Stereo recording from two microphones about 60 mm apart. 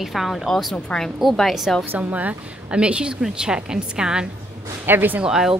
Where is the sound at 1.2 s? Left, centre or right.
Centre.